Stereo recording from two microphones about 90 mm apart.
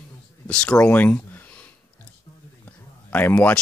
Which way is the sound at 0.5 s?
10° left (ahead or behind).